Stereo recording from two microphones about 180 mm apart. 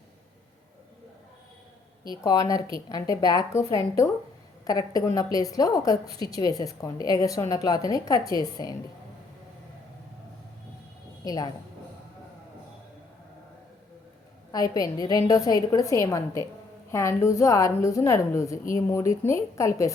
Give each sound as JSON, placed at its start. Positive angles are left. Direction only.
{"t": 2.0, "sound": "a woman's voice", "side_deg": 20}
{"t": 11.2, "sound": "a woman's voice", "side_deg": 20}
{"t": 14.5, "sound": "a woman's voice", "side_deg": 20}